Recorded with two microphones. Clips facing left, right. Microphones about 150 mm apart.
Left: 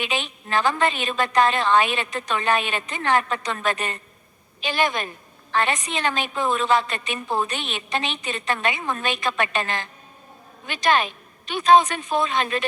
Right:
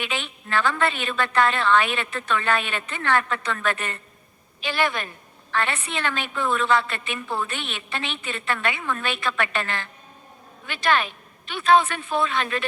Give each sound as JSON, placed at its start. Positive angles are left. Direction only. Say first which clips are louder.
{"t": 0.0, "sound": "a woman's voice", "louder": "left 3 dB", "side_deg": 20}